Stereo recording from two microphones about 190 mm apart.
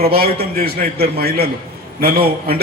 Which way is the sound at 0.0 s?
55° right (ahead or behind).